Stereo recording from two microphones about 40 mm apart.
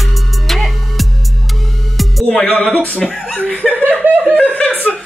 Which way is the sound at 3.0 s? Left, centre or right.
Centre.